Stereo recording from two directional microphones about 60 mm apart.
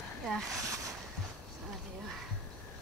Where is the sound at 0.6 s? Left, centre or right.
Right.